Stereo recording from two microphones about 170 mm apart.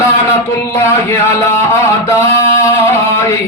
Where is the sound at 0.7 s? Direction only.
15° left (ahead or behind).